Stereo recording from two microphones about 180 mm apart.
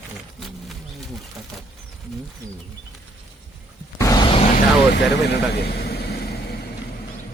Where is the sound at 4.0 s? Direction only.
20° left (ahead or behind).